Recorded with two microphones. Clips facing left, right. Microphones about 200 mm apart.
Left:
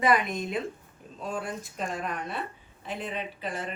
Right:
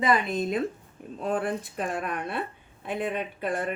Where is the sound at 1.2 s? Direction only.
60° right (ahead or behind).